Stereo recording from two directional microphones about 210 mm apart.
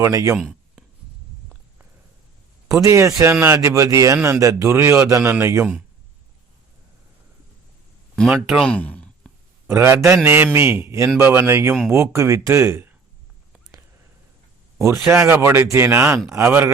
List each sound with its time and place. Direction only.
0.0 s speech: 15° right (ahead or behind)
0.3 s a sound: centre (ahead or behind)
2.8 s speech: 15° right (ahead or behind)
8.1 s speech: centre (ahead or behind)
9.6 s speech: 15° right (ahead or behind)
14.9 s speech: 10° right (ahead or behind)